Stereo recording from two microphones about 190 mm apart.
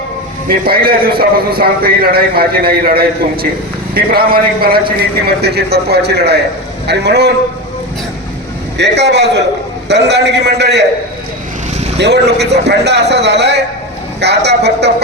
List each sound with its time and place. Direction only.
0.4 s a man's voice: 50° right (ahead or behind)
8.8 s a man's voice: 65° right (ahead or behind)
11.9 s a man's voice: 60° right (ahead or behind)